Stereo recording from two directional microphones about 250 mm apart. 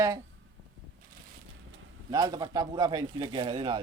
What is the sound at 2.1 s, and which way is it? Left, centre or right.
Speech, centre.